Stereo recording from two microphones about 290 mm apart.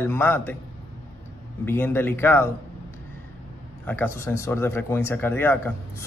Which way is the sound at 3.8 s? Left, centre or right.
Centre.